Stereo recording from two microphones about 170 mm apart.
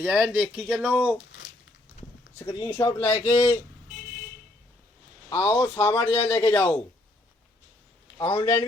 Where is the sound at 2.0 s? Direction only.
45° left (ahead or behind).